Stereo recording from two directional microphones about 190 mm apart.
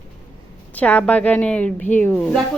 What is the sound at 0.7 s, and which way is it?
Speech, 10° left (ahead or behind).